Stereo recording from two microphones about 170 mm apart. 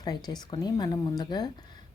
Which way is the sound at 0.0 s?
25° left (ahead or behind).